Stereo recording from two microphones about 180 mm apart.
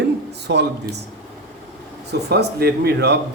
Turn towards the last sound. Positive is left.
turn(degrees=-65)  # may be behind; listen again after turning